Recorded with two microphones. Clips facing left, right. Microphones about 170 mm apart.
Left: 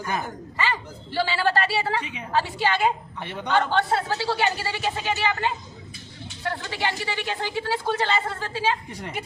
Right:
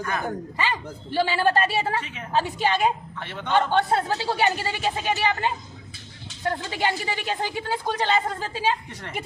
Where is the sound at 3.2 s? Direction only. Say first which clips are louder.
Left 2 dB; 15° left (ahead or behind).